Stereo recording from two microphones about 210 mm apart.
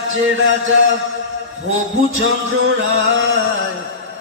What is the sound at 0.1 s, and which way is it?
Music, 65° right (ahead or behind).